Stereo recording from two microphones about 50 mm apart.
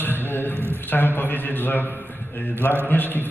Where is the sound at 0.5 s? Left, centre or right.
Right.